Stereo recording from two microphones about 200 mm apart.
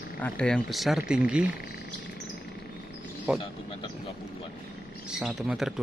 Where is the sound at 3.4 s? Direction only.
30° left (ahead or behind).